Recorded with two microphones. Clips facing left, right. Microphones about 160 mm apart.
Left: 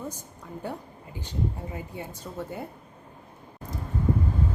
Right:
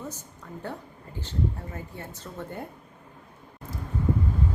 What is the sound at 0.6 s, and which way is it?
Speech, 10° left (ahead or behind).